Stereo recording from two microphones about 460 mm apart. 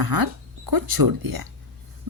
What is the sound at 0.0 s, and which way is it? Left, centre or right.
Speech, right.